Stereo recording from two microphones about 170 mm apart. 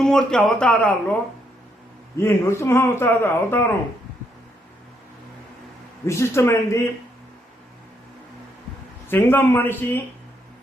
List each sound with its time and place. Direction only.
0.0 s speech: 5° left (ahead or behind)
2.1 s speech: 15° left (ahead or behind)
6.1 s speech: 15° left (ahead or behind)
9.0 s speech: 10° left (ahead or behind)